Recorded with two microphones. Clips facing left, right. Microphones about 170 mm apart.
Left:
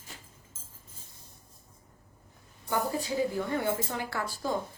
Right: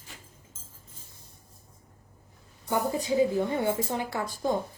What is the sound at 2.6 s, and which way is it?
A woman's voice, 20° right (ahead or behind).